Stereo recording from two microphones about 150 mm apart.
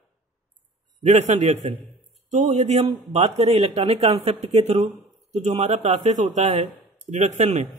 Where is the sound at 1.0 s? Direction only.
50° right (ahead or behind).